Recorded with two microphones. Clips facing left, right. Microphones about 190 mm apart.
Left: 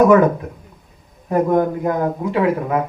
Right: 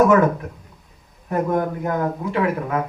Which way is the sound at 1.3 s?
20° left (ahead or behind).